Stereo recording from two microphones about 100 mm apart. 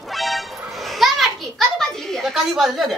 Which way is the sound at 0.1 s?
Centre (ahead or behind).